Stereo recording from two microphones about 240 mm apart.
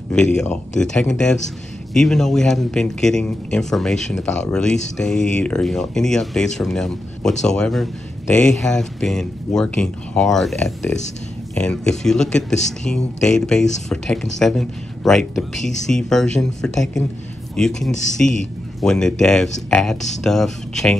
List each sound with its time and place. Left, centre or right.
0.4 s speech: centre